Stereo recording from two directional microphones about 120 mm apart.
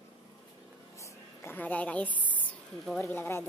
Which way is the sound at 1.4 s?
15° left (ahead or behind).